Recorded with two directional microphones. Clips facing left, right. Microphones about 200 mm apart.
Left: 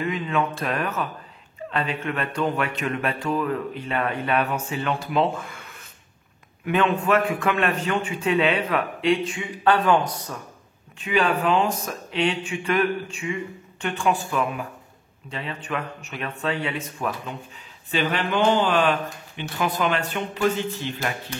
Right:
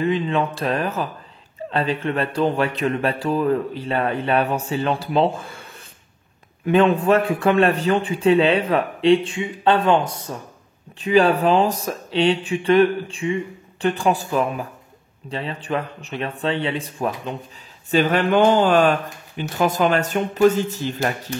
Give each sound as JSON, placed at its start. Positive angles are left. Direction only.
{"t": 0.0, "sound": "a man's voice", "side_deg": -30}
{"t": 17.9, "sound": "speech", "side_deg": -45}